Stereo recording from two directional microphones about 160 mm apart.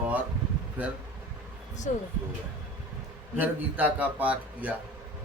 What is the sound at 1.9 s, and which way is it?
Speech, 50° left (ahead or behind).